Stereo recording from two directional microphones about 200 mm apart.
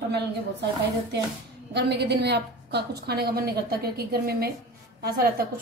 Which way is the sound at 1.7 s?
55° right (ahead or behind).